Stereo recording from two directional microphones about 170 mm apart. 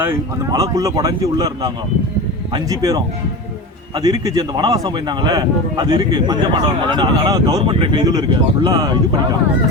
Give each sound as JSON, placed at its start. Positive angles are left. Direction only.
{"t": 0.0, "sound": "a man's voice", "side_deg": -15}